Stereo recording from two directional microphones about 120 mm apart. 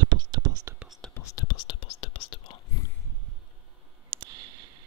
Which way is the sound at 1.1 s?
30° left (ahead or behind).